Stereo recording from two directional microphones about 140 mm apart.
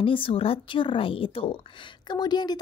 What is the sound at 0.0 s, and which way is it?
Speech, 40° left (ahead or behind).